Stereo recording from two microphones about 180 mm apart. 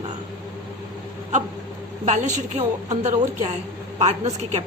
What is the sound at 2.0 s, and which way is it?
A woman's voice, 40° right (ahead or behind).